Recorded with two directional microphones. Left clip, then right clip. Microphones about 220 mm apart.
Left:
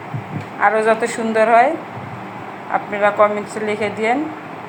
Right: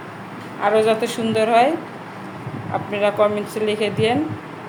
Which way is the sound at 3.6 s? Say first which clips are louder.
Left 1 dB; 15° left (ahead or behind).